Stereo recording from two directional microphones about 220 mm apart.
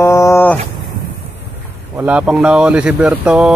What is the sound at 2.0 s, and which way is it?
A man's voice, 5° right (ahead or behind).